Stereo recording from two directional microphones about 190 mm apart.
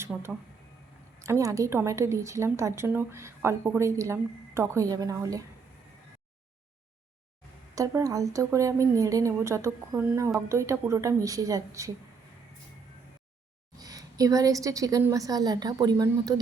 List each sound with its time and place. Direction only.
0.1 s a woman's voice: 5° right (ahead or behind)
1.2 s a woman's voice: 15° right (ahead or behind)
7.8 s a woman's voice: 20° right (ahead or behind)
13.7 s a woman's voice: 20° right (ahead or behind)